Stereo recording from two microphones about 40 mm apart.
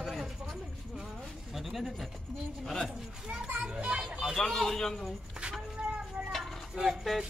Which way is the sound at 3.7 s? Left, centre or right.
Right.